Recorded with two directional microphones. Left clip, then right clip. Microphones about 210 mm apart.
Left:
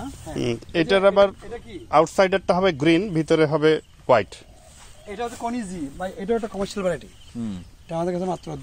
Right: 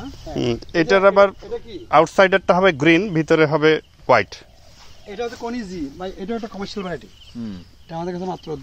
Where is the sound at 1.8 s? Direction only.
25° right (ahead or behind); by 4.4 s 5° right (ahead or behind).